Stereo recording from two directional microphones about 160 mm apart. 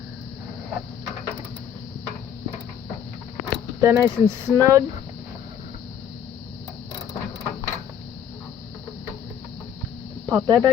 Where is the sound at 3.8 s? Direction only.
20° right (ahead or behind).